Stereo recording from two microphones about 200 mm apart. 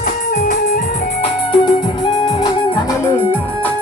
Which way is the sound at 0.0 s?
45° left (ahead or behind).